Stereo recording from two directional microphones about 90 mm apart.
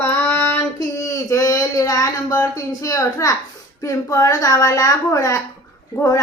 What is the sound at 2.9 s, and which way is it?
A child's voice, 40° left (ahead or behind).